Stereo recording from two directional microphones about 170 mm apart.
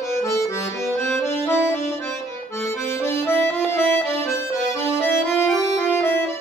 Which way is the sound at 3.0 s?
15° left (ahead or behind).